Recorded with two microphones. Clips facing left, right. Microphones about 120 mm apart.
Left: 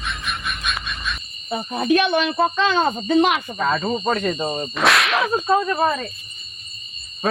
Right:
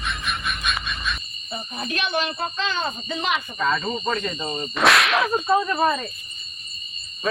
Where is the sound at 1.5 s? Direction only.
90° left; by 3.4 s 60° left (ahead or behind).